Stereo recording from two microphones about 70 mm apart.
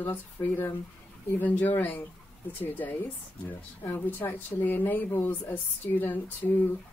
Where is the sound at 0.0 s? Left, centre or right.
Left.